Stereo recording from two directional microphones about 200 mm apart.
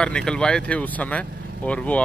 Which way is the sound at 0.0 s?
5° left (ahead or behind).